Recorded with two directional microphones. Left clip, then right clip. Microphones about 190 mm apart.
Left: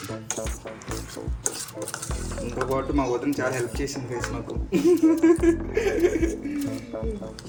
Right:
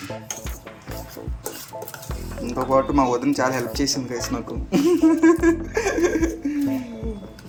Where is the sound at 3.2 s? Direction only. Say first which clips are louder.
Right 4 dB; 25° right (ahead or behind).